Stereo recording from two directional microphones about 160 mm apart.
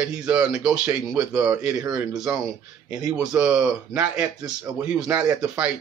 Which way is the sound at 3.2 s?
5° right (ahead or behind).